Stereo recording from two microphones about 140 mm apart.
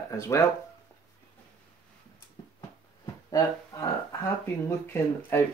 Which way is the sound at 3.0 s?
25° left (ahead or behind).